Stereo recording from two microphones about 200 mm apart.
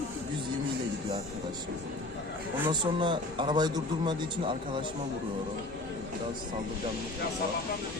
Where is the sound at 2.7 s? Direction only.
25° right (ahead or behind).